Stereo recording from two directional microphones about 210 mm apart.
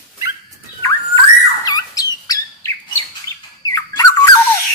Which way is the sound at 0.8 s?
15° left (ahead or behind).